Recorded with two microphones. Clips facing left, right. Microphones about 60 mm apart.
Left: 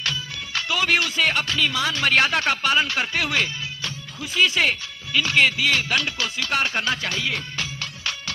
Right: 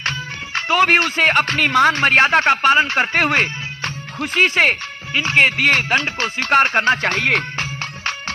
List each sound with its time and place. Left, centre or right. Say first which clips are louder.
0.0 s speech: right 4 dB; right
7.5 s music: right 5 dB; right